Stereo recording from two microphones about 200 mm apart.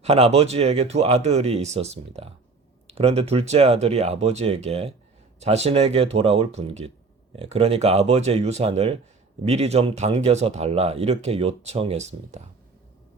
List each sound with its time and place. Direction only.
0.0 s speech: 30° right (ahead or behind)